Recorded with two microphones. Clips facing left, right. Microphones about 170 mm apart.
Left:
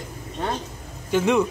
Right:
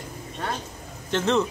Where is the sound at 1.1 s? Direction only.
10° left (ahead or behind).